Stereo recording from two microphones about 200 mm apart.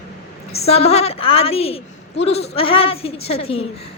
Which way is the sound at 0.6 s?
30° left (ahead or behind).